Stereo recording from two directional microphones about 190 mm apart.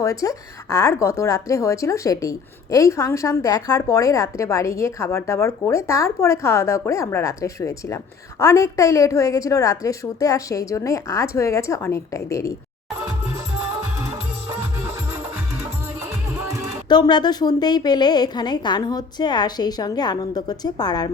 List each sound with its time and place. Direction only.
0.0 s speech: 15° left (ahead or behind)
16.9 s a woman's voice: 20° left (ahead or behind)